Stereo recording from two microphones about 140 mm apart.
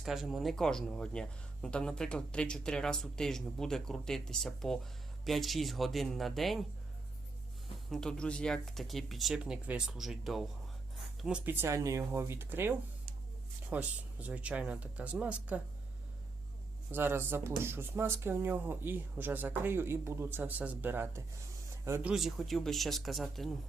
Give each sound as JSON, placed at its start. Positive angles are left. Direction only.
{"t": 0.0, "sound": "speech", "side_deg": 0}
{"t": 7.9, "sound": "speech", "side_deg": 0}
{"t": 11.4, "sound": "speech", "side_deg": -15}
{"t": 16.9, "sound": "speech", "side_deg": -15}
{"t": 22.0, "sound": "speech", "side_deg": 0}